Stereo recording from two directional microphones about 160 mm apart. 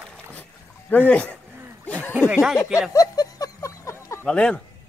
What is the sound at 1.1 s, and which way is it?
Speech, 10° left (ahead or behind).